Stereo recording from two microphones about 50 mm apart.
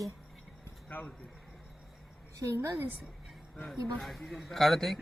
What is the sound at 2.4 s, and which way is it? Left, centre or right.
Speech, right.